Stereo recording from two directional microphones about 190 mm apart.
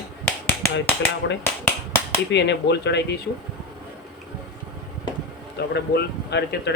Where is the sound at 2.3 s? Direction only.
65° left (ahead or behind).